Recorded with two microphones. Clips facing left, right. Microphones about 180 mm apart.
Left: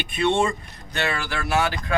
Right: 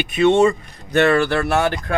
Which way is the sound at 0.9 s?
55° right (ahead or behind).